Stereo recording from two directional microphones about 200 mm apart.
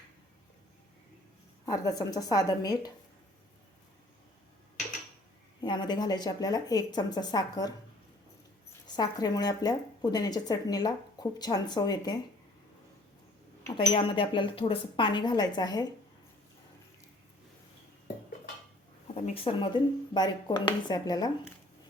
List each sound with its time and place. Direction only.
1.6 s speech: 20° left (ahead or behind)
5.6 s speech: 20° left (ahead or behind)
9.0 s speech: 20° left (ahead or behind)
13.7 s speech: 25° left (ahead or behind)
19.1 s speech: 30° left (ahead or behind)